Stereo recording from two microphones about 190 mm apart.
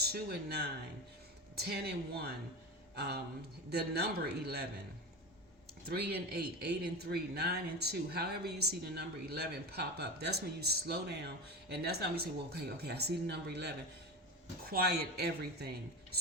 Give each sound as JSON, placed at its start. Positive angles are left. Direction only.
{"t": 0.0, "sound": "speech", "side_deg": -55}
{"t": 5.9, "sound": "speech", "side_deg": -55}